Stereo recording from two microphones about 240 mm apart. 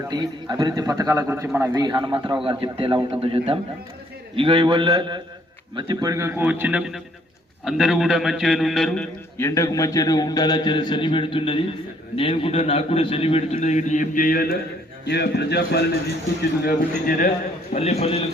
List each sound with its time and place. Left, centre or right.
0.0 s a man's voice: centre
9.4 s a man's voice: centre; by 17.3 s left
17.7 s a man's voice: left